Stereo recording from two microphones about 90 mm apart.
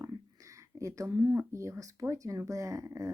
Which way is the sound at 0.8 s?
35° right (ahead or behind).